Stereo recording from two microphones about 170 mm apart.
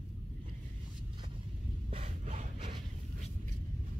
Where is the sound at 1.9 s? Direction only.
35° right (ahead or behind).